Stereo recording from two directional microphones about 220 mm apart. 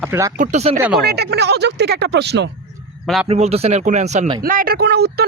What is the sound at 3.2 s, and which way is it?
Speech, 30° right (ahead or behind).